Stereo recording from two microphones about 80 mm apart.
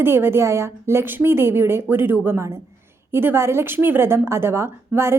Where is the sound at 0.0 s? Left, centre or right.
Right.